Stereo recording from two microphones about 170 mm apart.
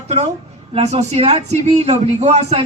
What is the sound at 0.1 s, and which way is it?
A woman's voice, 40° right (ahead or behind).